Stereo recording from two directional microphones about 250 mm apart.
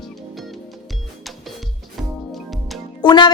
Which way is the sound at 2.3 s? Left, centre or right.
Centre.